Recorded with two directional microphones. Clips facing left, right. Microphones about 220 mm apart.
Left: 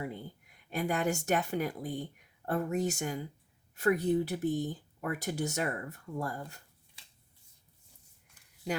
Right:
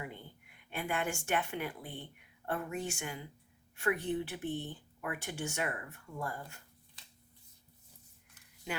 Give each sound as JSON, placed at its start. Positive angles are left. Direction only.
{"t": 0.0, "sound": "speech", "side_deg": 40}